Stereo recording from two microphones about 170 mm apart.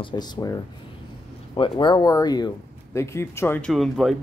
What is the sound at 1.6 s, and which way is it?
Speech, 25° left (ahead or behind).